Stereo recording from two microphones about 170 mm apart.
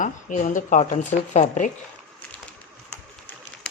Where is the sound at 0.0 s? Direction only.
50° left (ahead or behind).